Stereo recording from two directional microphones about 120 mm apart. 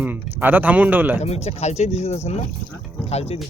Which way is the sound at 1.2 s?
60° left (ahead or behind).